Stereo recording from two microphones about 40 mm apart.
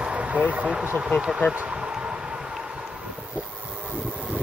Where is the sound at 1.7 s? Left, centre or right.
Right.